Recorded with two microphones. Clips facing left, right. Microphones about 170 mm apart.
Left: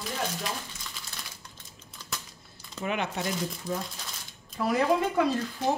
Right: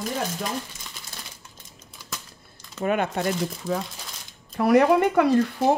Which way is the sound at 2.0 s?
10° right (ahead or behind).